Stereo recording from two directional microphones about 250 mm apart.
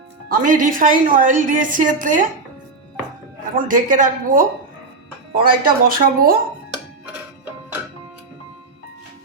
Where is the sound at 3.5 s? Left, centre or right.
Right.